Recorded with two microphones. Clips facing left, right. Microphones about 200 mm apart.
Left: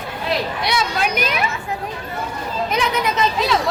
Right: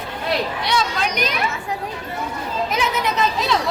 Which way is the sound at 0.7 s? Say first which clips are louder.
Left 2 dB; 10° left (ahead or behind).